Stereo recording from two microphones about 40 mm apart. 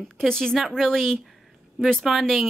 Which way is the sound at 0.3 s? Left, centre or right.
Centre.